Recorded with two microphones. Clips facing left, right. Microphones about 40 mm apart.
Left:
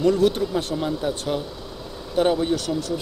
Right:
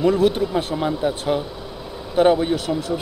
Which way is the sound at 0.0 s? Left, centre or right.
Centre.